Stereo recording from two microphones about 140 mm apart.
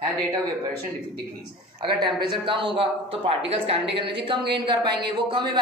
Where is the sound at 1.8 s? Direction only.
30° right (ahead or behind).